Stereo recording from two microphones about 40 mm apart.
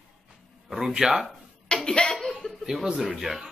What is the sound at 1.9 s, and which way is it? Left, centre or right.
Speech, centre.